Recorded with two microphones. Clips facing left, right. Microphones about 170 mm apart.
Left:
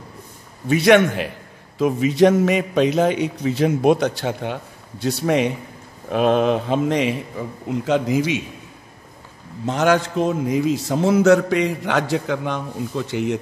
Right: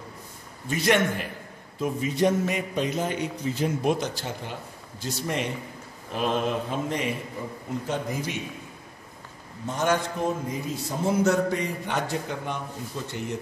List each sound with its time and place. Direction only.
0.7 s a man's voice: 70° left (ahead or behind); by 8.4 s 90° left
9.7 s a man's voice: 90° left